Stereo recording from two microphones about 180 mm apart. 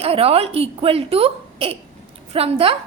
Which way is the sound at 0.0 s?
35° right (ahead or behind).